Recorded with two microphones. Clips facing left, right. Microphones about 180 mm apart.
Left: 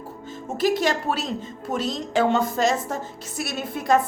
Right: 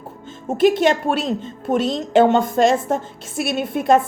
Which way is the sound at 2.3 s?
55° right (ahead or behind).